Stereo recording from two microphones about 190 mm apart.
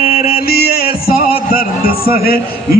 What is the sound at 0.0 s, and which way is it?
Music, 50° left (ahead or behind).